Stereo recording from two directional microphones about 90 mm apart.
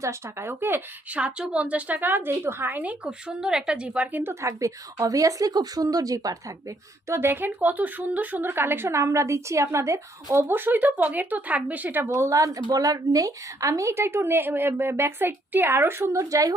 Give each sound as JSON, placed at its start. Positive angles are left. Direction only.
{"t": 0.0, "sound": "a woman's voice", "side_deg": -30}
{"t": 1.2, "sound": "a woman's voice", "side_deg": -10}